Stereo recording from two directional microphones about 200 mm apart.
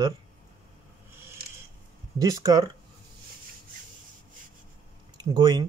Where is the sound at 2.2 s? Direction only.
20° right (ahead or behind).